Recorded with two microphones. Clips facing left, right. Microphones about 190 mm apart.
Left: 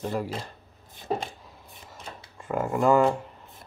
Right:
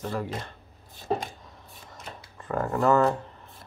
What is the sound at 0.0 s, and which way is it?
Speech, 15° left (ahead or behind).